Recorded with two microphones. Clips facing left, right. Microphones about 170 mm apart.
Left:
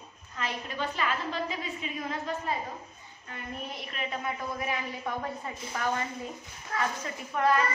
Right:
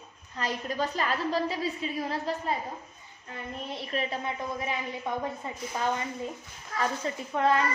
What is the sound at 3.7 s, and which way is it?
A woman's voice, 30° right (ahead or behind).